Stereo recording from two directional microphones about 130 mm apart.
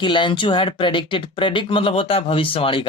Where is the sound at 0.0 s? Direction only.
40° left (ahead or behind).